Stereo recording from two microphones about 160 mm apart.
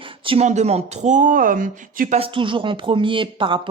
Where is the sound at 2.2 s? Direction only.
30° right (ahead or behind).